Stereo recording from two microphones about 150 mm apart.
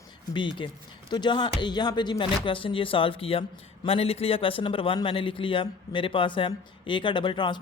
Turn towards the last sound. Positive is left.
turn(degrees=30)  # may be behind; listen again after turning